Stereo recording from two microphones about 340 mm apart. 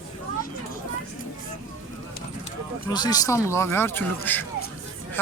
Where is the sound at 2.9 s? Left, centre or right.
Centre.